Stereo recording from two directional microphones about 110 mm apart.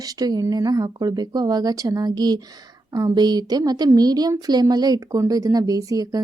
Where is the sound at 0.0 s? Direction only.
35° right (ahead or behind).